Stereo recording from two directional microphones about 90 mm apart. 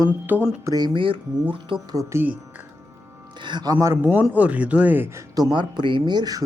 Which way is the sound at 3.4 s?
55° right (ahead or behind).